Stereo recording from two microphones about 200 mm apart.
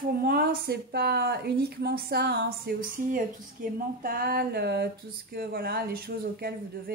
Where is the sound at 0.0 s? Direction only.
50° right (ahead or behind).